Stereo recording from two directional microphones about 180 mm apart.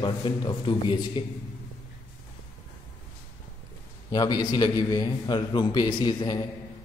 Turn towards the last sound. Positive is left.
turn(degrees=25)  # may be behind; listen again after turning